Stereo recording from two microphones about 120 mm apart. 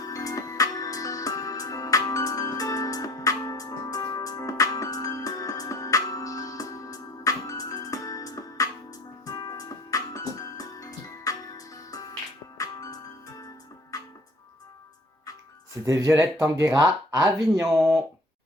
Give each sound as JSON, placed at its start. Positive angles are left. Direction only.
{"t": 0.0, "sound": "music", "side_deg": 30}
{"t": 15.9, "sound": "speech", "side_deg": -25}
{"t": 17.7, "sound": "speech", "side_deg": -5}